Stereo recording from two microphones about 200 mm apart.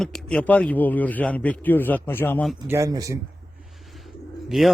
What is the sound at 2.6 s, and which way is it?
Speech, 15° right (ahead or behind).